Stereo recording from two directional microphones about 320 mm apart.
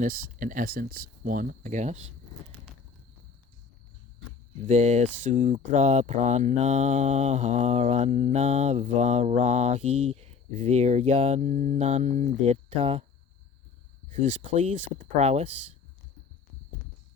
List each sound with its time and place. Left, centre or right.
0.0 s speech: right
4.6 s speech: right
14.5 s speech: right